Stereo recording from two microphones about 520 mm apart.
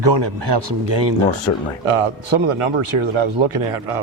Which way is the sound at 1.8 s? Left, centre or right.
Right.